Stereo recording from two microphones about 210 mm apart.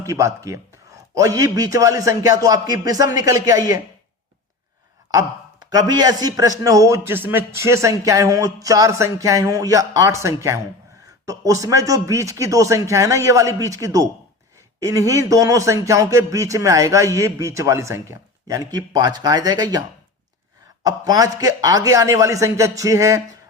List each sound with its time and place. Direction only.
0.0 s a man's voice: 15° right (ahead or behind)
5.7 s a man's voice: 20° right (ahead or behind)
20.8 s a man's voice: 15° right (ahead or behind)